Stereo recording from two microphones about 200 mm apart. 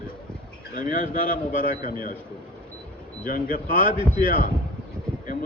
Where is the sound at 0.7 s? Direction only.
40° left (ahead or behind).